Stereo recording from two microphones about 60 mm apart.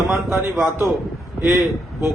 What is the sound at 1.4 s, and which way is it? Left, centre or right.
Speech, centre.